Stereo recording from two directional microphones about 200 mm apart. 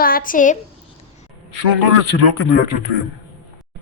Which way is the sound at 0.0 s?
45° left (ahead or behind).